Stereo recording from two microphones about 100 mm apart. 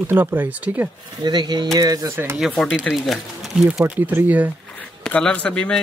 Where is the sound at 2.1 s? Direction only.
25° right (ahead or behind).